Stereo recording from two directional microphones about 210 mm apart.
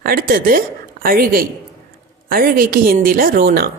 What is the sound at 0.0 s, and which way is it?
A woman's voice, 45° right (ahead or behind).